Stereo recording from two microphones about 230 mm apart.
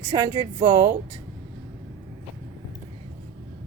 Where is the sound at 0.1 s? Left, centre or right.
Centre.